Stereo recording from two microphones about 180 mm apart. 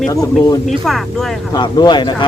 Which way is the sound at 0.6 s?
Centre (ahead or behind).